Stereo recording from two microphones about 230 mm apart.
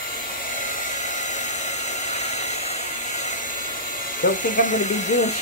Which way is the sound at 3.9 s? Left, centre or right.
Left.